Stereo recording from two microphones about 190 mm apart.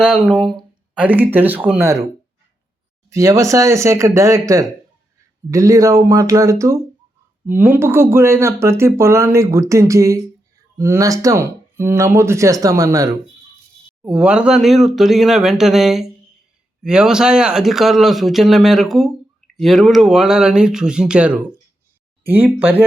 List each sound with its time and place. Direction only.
0.0 s a man's voice: 5° right (ahead or behind)
0.9 s speech: 10° right (ahead or behind)
3.1 s speech: 15° right (ahead or behind)
14.0 s a man's voice: 5° right (ahead or behind)